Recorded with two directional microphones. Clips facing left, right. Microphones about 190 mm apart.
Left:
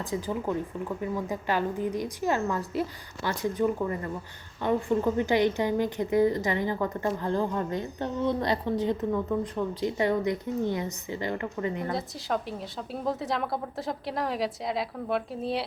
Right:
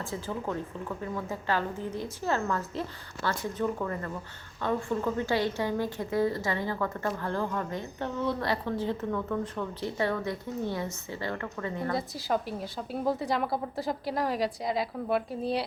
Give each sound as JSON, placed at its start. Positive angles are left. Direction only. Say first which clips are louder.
{"t": 0.0, "sound": "a woman's voice", "louder": "left 4 dB", "side_deg": 15}
{"t": 11.9, "sound": "a woman's voice", "louder": "right 1 dB", "side_deg": 0}